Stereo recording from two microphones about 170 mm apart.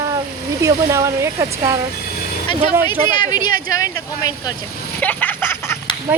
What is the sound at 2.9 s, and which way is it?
Speech, 25° left (ahead or behind).